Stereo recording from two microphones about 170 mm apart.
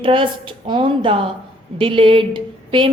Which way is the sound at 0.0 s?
30° right (ahead or behind).